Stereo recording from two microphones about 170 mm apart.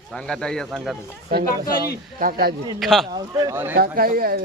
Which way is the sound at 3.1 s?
25° right (ahead or behind).